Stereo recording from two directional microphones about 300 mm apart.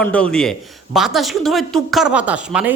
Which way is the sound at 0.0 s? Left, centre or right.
Centre.